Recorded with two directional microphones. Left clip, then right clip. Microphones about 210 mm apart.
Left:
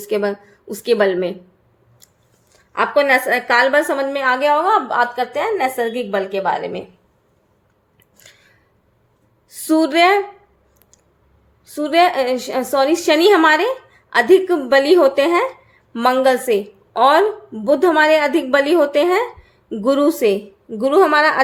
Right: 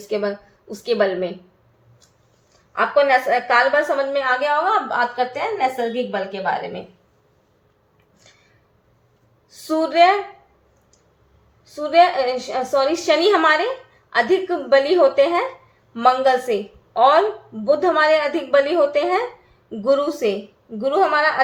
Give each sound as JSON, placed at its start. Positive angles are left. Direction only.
{"t": 0.1, "sound": "a woman's voice", "side_deg": 40}
{"t": 2.7, "sound": "a woman's voice", "side_deg": 45}
{"t": 8.2, "sound": "a sound", "side_deg": 50}
{"t": 9.5, "sound": "a woman's voice", "side_deg": 45}
{"t": 11.6, "sound": "a woman's voice", "side_deg": 45}